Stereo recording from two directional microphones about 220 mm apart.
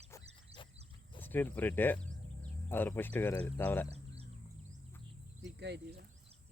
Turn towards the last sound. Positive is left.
turn(degrees=-50)  # may be behind; listen again after turning